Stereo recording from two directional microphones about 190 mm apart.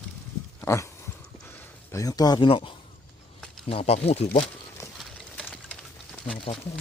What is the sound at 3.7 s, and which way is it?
Speech, 30° left (ahead or behind).